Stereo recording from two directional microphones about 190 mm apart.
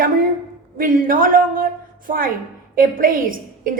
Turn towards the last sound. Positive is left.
turn(degrees=-45)  # may be behind; listen again after turning